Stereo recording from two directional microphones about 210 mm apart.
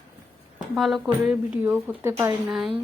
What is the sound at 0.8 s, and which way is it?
A woman's voice, centre (ahead or behind).